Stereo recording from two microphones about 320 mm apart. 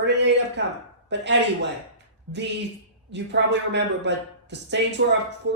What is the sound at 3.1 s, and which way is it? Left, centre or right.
Speech, right.